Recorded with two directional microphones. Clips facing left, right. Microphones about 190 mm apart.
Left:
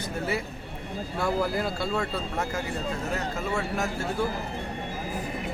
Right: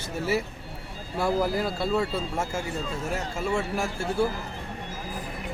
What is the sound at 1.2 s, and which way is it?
Speech, centre (ahead or behind).